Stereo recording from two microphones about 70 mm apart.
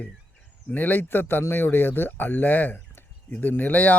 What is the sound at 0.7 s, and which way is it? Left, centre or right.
Speech, left.